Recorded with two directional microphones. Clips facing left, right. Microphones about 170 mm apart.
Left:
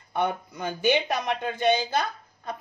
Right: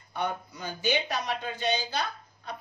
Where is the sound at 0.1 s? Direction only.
60° left (ahead or behind).